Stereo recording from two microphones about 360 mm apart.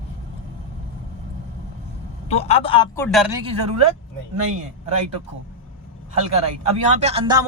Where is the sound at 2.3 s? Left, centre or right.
Centre.